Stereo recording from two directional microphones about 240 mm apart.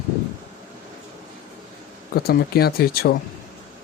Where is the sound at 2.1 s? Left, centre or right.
Left.